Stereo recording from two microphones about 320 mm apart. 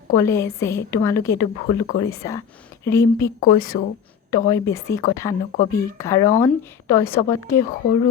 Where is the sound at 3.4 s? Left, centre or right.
Left.